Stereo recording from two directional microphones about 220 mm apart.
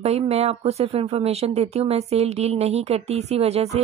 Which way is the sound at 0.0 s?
30° right (ahead or behind).